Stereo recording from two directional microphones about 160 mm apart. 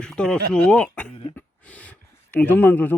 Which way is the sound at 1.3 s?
10° left (ahead or behind).